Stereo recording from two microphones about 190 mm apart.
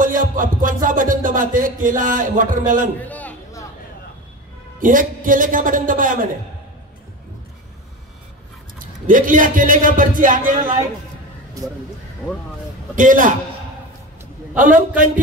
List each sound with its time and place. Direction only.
0.0 s music: 45° right (ahead or behind)
3.0 s a sound: 10° left (ahead or behind)
4.7 s a man's voice: 45° right (ahead or behind)
8.7 s a man's voice: 45° right (ahead or behind)
12.9 s a man's voice: 45° right (ahead or behind)
14.6 s a man's voice: 45° right (ahead or behind)